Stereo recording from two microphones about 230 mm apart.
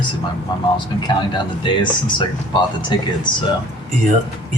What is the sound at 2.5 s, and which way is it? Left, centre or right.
Speech, centre.